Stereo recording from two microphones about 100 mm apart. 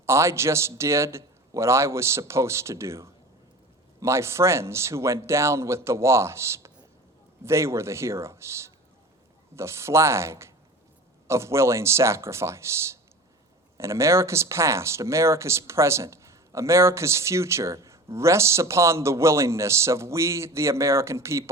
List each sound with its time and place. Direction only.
0.0 s speech: 30° right (ahead or behind)